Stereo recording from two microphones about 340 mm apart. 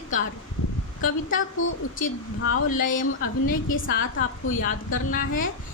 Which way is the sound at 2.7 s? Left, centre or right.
Left.